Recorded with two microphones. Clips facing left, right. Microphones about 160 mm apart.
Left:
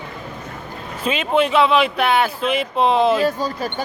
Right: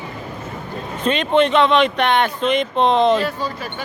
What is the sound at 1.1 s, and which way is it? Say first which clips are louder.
Speech: right 2 dB; 5° left (ahead or behind).